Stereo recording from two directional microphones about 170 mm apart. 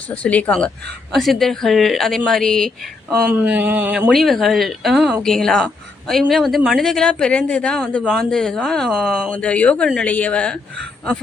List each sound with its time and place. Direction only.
0.1 s speech: 10° left (ahead or behind)
3.2 s speech: 10° right (ahead or behind)
4.1 s speech: centre (ahead or behind)
9.3 s speech: 5° left (ahead or behind)